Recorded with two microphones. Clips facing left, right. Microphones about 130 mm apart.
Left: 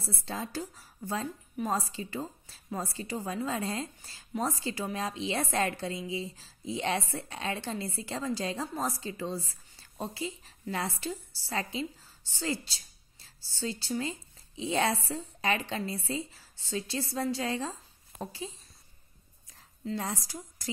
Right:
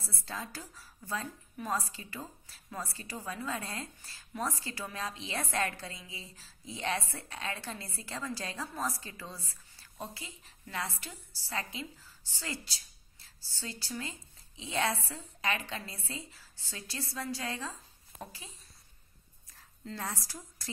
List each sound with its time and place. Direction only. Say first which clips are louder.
0.0 s a woman's voice: left 5 dB; 25° left (ahead or behind)
19.8 s a woman's voice: left 5 dB; 15° left (ahead or behind)